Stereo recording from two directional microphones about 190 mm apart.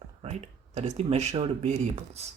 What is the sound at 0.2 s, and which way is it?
Speech, 35° right (ahead or behind).